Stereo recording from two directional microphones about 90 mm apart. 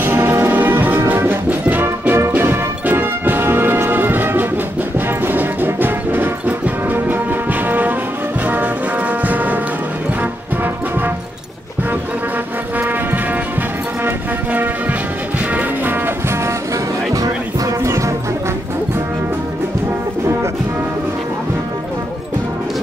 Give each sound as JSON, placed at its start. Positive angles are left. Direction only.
{"t": 0.0, "sound": "music", "side_deg": -25}
{"t": 9.2, "sound": "music", "side_deg": -15}
{"t": 12.7, "sound": "music", "side_deg": -20}
{"t": 17.1, "sound": "music", "side_deg": -35}